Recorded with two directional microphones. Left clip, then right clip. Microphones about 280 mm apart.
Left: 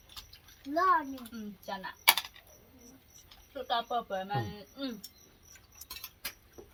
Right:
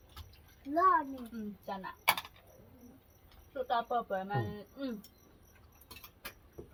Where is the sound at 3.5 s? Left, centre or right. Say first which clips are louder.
Even; centre.